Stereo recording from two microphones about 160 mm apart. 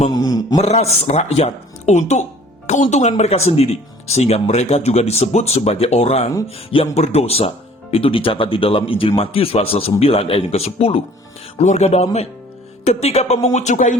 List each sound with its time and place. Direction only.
0.1 s a man's voice: 25° left (ahead or behind)
0.6 s speech: 40° left (ahead or behind)